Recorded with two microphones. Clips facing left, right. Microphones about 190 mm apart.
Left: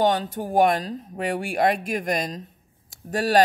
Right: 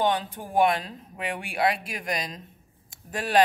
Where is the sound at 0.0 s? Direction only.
40° left (ahead or behind).